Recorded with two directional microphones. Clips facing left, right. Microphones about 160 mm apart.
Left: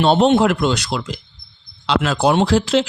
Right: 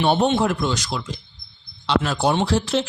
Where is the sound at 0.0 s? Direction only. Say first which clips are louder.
Left 5 dB; 70° left (ahead or behind); by 2.1 s 90° left.